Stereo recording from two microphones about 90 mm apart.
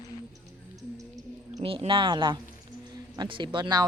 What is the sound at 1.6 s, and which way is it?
A woman's voice, 80° right.